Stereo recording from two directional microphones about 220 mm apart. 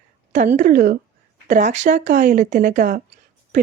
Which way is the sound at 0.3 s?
35° right (ahead or behind).